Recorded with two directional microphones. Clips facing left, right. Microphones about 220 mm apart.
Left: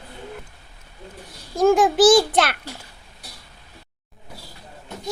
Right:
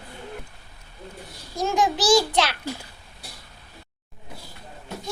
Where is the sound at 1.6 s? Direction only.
50° left (ahead or behind).